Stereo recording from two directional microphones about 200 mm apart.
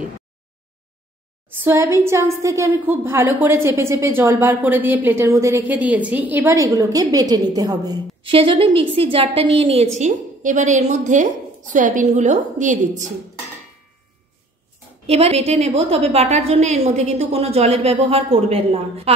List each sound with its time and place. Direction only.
1.6 s a woman's voice: 10° right (ahead or behind); by 13.1 s 40° right (ahead or behind)
15.0 s a woman's voice: 30° right (ahead or behind)